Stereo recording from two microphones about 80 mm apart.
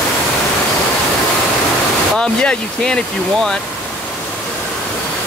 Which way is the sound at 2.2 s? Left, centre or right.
Centre.